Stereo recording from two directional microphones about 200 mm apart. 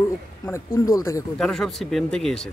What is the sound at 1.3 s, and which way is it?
Speech, centre (ahead or behind).